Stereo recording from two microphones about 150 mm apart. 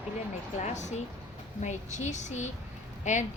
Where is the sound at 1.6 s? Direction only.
50° left (ahead or behind).